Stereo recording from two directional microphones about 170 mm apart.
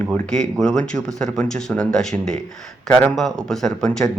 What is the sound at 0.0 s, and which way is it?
Speech, 5° left (ahead or behind).